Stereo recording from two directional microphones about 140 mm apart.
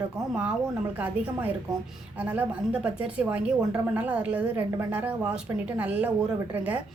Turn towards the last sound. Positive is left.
turn(degrees=-10)  # may be behind; listen again after turning